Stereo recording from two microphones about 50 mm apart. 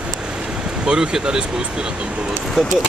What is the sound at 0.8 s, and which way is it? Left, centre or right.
Speech, centre.